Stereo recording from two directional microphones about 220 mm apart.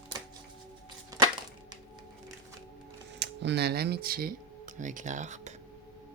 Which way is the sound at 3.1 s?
50° right (ahead or behind).